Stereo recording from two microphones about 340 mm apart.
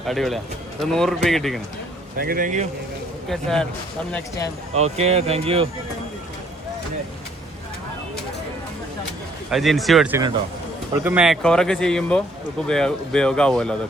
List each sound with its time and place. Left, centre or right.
0.0 s speech: centre
2.1 s speech: right
3.2 s speech: centre
4.7 s speech: centre
9.5 s speech: centre